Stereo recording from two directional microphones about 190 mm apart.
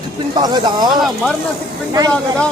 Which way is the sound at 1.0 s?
Centre (ahead or behind).